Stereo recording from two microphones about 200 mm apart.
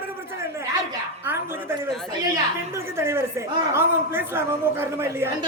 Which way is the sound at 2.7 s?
10° right (ahead or behind).